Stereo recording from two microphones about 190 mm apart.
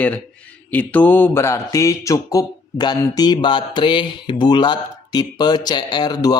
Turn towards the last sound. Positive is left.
turn(degrees=20)  # may be behind; listen again after turning